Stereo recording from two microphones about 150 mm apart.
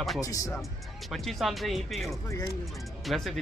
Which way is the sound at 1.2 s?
Centre (ahead or behind).